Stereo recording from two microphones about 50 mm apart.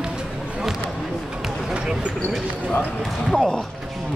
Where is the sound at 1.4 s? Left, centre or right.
Centre.